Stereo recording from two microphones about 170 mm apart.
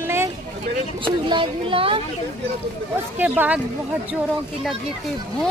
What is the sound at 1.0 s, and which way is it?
Speech, 30° right (ahead or behind).